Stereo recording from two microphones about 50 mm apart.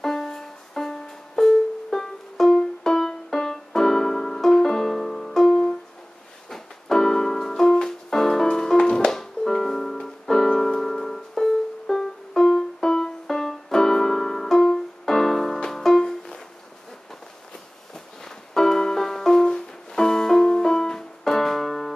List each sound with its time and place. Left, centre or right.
0.0 s music: centre
6.5 s keyboard: centre
16.0 s music: centre
17.9 s music: centre